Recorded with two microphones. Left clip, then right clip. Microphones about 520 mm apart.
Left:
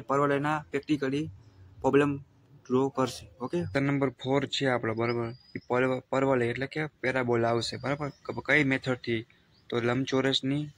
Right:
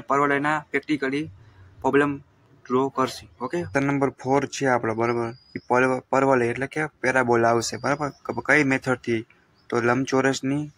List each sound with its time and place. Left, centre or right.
0.0 s speech: left